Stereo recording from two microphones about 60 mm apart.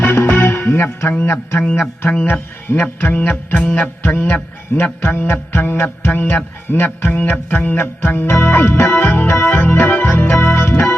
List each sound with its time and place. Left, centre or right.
0.0 s music: left
1.2 s speech: left
2.2 s music: left
3.7 s speech: left
9.3 s organ: left